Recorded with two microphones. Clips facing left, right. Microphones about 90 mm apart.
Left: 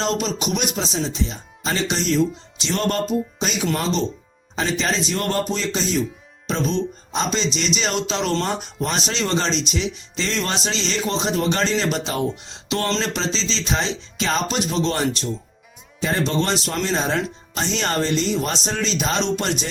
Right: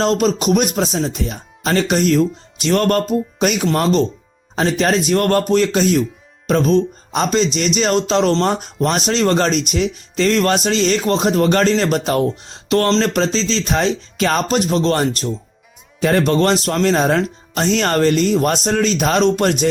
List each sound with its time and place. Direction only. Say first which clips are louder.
0.0 s a man's voice: right 7 dB; 45° right (ahead or behind)
12.6 s music: right 8 dB; 50° right (ahead or behind)
13.0 s speech: right 7 dB; 50° right (ahead or behind)
16.0 s speech: right 7 dB; 60° right (ahead or behind)